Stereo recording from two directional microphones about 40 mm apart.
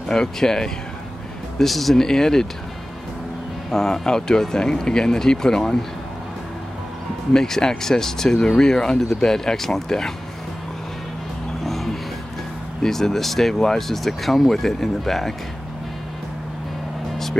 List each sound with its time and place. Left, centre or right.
0.1 s speech: centre
3.7 s speech: centre
7.3 s speech: centre
11.6 s music: centre
12.8 s speech: centre